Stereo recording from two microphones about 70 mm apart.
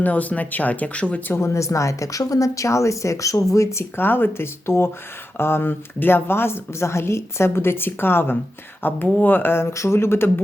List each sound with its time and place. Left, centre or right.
0.0 s speech: left
1.3 s a woman's voice: left
3.9 s a woman's voice: left